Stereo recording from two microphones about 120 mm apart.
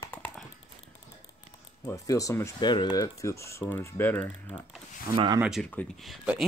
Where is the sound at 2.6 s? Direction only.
35° left (ahead or behind); by 4.2 s 15° left (ahead or behind).